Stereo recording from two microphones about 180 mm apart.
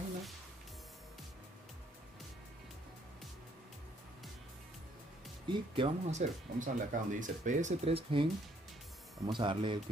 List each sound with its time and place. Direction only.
5.5 s speech: 30° right (ahead or behind)